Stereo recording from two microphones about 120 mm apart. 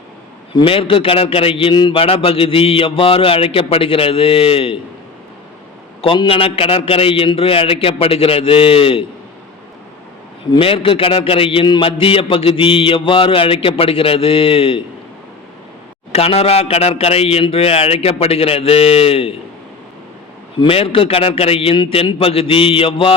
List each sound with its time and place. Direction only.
0.5 s a man's voice: 50° left (ahead or behind)
6.0 s a man's voice: 50° left (ahead or behind)
10.6 s a man's voice: 50° left (ahead or behind)
16.1 s speech: 55° left (ahead or behind)
20.6 s a man's voice: 50° left (ahead or behind)